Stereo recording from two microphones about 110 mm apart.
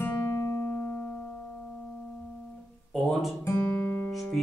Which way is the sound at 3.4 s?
20° left (ahead or behind).